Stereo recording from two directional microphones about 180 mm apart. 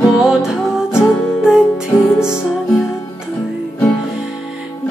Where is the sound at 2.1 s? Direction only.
15° left (ahead or behind).